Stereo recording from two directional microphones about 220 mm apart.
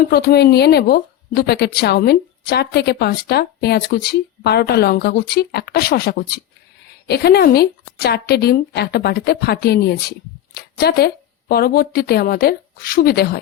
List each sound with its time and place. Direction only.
0.0 s a woman's voice: 45° left (ahead or behind)